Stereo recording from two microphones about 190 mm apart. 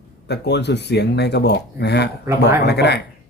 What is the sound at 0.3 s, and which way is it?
Speech, 60° left (ahead or behind).